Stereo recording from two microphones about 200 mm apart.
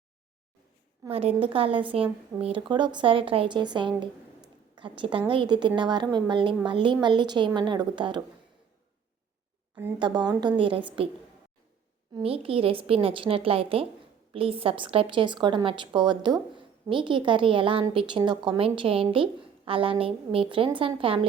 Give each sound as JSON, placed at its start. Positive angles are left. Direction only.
{"t": 1.1, "sound": "a woman's voice", "side_deg": -30}
{"t": 10.0, "sound": "a woman's voice", "side_deg": -20}
{"t": 12.1, "sound": "a woman's voice", "side_deg": -30}